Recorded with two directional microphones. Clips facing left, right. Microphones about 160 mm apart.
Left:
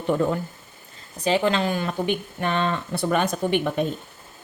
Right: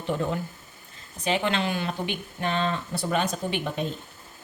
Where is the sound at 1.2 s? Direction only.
35° left (ahead or behind); by 3.8 s 55° left (ahead or behind).